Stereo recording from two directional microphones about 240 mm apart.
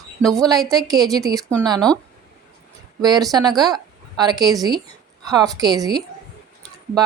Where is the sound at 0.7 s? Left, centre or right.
Centre.